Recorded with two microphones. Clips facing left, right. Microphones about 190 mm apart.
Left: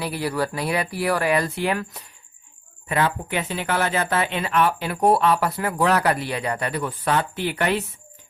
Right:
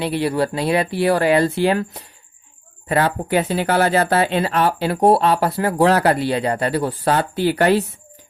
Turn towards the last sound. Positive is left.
turn(degrees=-35)  # may be behind; listen again after turning